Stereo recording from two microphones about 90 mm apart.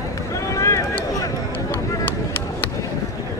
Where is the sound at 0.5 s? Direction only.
35° left (ahead or behind).